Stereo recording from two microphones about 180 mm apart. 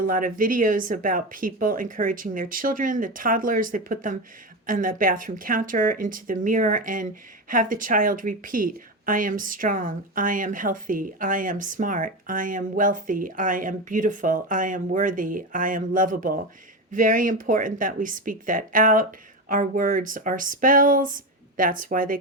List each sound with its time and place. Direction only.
0.0 s speech: 50° right (ahead or behind)